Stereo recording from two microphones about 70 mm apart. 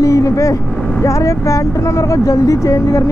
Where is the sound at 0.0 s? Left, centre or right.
Left.